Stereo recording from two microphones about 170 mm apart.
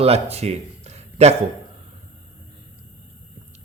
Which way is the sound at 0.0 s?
35° right (ahead or behind).